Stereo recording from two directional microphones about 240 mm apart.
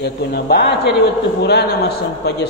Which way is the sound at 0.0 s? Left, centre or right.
Left.